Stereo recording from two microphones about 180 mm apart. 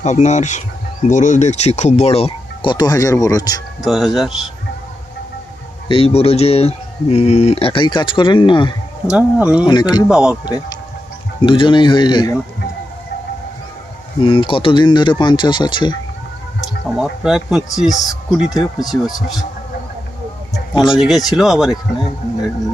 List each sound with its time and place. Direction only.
0.0 s speech: 40° left (ahead or behind); by 3.6 s 20° left (ahead or behind)
3.8 s speech: centre (ahead or behind)
5.9 s speech: 35° left (ahead or behind)
9.0 s speech: 5° right (ahead or behind)
9.6 s speech: 25° left (ahead or behind)
10.1 s speech: 5° right (ahead or behind)
10.4 s speech: 20° left (ahead or behind)
14.2 s speech: 30° left (ahead or behind)
17.0 s speech: centre (ahead or behind)
20.7 s speech: 25° left (ahead or behind)
21.0 s speech: centre (ahead or behind)